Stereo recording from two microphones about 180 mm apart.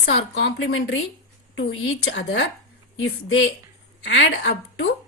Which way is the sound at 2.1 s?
90° left.